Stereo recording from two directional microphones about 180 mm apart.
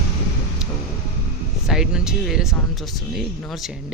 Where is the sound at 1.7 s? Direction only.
5° right (ahead or behind).